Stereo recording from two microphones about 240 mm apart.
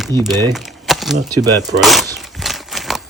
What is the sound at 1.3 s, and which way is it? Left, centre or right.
Speech, centre.